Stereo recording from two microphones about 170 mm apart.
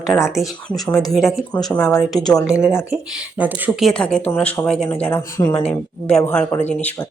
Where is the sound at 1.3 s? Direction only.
5° left (ahead or behind).